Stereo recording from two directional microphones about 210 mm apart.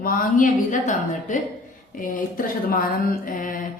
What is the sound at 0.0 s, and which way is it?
A woman's voice, 40° left (ahead or behind).